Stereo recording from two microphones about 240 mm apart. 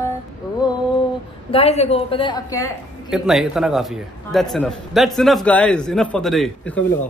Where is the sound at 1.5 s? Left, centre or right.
Left.